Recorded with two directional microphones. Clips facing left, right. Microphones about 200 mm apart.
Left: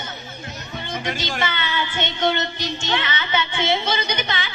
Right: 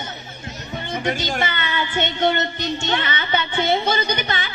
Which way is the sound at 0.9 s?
45° right (ahead or behind).